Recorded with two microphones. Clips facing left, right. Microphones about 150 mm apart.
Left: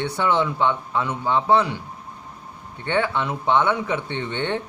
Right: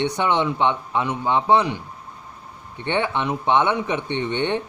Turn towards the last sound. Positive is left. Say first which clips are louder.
# right 3 dB
turn(degrees=-15)  # may be behind; listen again after turning